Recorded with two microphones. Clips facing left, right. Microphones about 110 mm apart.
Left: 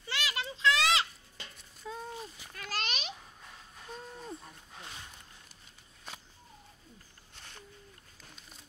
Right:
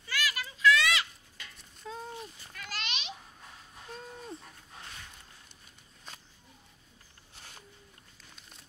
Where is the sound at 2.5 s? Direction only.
40° left (ahead or behind).